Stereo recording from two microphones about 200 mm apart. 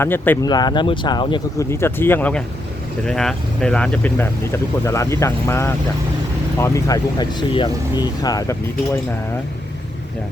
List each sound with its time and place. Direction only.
0.0 s speech: 10° left (ahead or behind)
0.4 s speech: 20° left (ahead or behind)
1.7 s speech: 10° left (ahead or behind)